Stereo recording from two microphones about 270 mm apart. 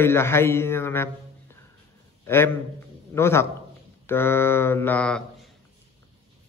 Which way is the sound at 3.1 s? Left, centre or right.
Centre.